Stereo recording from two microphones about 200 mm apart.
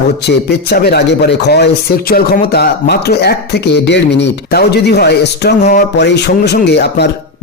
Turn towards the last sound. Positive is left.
turn(degrees=55)  # may be behind; listen again after turning